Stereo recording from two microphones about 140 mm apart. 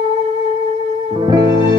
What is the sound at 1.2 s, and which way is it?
Music, 25° right (ahead or behind).